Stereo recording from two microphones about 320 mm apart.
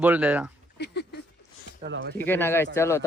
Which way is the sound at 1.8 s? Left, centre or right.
Right.